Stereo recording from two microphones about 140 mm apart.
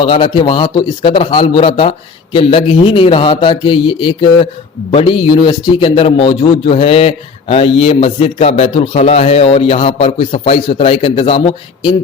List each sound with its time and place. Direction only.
0.0 s a man's voice: 40° left (ahead or behind)